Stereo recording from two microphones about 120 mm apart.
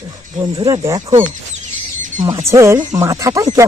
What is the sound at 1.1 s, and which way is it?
Speech, 80° right.